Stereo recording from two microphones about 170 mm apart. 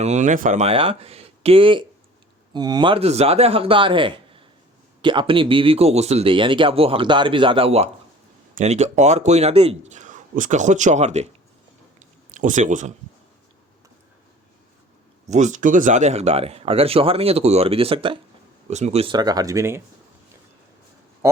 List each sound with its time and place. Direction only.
0.0 s speech: 45° right (ahead or behind)
11.9 s a sound: 45° right (ahead or behind)
15.3 s speech: 45° right (ahead or behind); by 19.8 s 15° right (ahead or behind)